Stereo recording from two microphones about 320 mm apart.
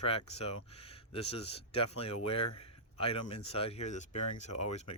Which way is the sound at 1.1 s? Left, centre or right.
Centre.